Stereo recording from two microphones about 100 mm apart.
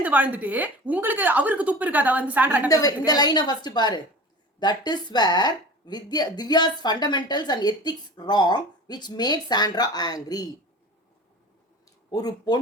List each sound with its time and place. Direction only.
0.0 s a woman's voice: 15° right (ahead or behind)
2.6 s speech: 40° left (ahead or behind)
12.1 s speech: 40° left (ahead or behind)